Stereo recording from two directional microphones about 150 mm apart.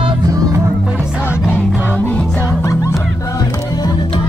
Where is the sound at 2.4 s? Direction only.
20° left (ahead or behind).